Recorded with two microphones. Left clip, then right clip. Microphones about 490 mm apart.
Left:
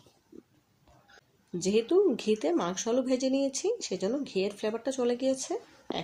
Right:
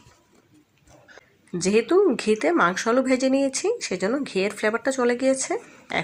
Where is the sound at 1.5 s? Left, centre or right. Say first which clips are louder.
Right 6 dB; right.